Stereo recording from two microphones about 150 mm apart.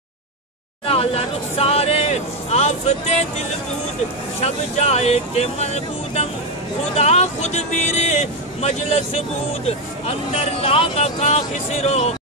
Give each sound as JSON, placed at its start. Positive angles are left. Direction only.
{"t": 0.8, "sound": "speech", "side_deg": 40}
{"t": 4.4, "sound": "speech", "side_deg": 45}